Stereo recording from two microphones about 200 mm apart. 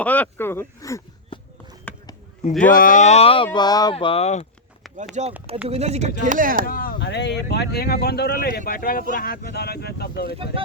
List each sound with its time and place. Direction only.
0.0 s speech: 5° left (ahead or behind)
1.9 s a sound: 5° left (ahead or behind)
2.4 s speech: 40° left (ahead or behind)
5.2 s speech: 35° right (ahead or behind)
6.7 s speech: 45° left (ahead or behind)
10.3 s speech: 25° right (ahead or behind)